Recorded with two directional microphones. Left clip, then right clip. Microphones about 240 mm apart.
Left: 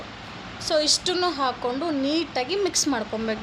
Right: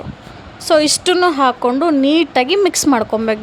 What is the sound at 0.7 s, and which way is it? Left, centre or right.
A woman's voice, right.